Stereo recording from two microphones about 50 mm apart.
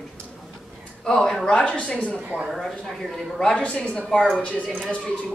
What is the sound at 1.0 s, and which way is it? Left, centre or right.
Speech, centre.